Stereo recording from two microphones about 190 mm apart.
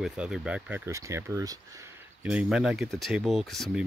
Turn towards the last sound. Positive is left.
turn(degrees=0)  # may be behind; listen again after turning